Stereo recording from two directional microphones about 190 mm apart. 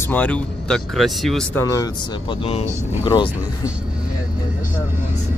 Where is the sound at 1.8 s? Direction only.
25° left (ahead or behind).